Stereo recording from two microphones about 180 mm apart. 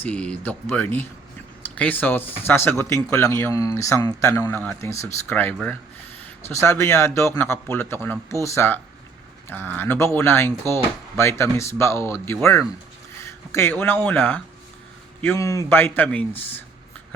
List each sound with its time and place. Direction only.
0.0 s speech: 5° left (ahead or behind)